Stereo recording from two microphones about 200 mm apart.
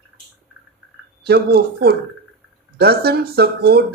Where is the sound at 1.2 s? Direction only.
50° right (ahead or behind).